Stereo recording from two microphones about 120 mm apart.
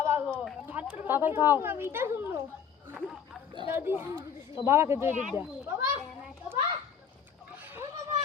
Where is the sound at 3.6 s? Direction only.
15° right (ahead or behind).